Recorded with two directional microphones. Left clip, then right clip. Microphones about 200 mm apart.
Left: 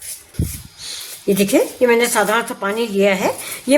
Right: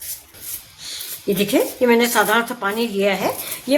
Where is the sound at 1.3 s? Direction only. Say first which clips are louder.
Left 3 dB; 25° left (ahead or behind).